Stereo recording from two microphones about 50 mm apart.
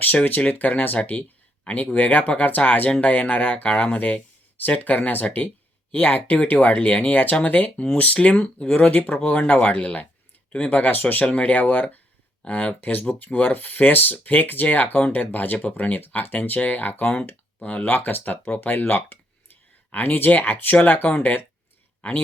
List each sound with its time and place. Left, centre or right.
0.3 s speech: left
0.9 s speech: left
3.7 s speech: centre
3.9 s a sound: left
4.8 s speech: left
8.7 s speech: left
17.8 s speech: left